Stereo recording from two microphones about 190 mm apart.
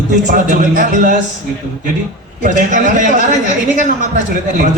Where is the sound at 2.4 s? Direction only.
40° right (ahead or behind).